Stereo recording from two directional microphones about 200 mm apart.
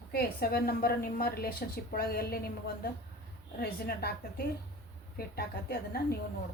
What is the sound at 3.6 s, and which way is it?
A woman's voice, 50° left (ahead or behind).